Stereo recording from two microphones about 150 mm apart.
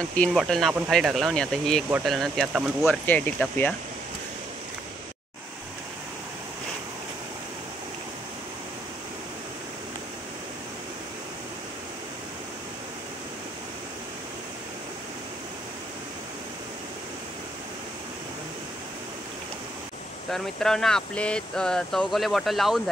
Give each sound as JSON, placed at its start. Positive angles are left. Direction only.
{"t": 0.0, "sound": "speech", "side_deg": 10}
{"t": 20.2, "sound": "speech", "side_deg": 0}